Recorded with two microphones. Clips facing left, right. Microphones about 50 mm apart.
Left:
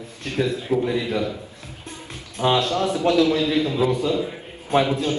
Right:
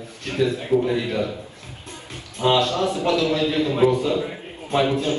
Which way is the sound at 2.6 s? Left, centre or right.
Right.